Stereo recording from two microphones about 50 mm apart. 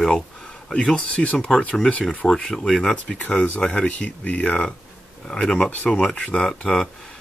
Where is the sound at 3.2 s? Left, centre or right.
Left.